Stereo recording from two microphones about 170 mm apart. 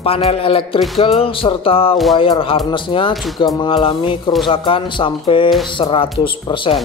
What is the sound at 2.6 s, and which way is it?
Speech, 30° left (ahead or behind).